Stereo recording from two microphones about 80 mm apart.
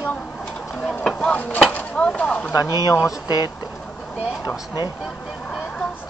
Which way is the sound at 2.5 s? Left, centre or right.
Left.